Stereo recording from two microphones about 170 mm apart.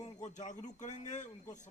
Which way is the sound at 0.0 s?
45° left (ahead or behind).